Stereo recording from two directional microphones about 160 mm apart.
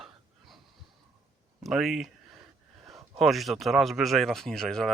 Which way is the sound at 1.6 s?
Centre (ahead or behind).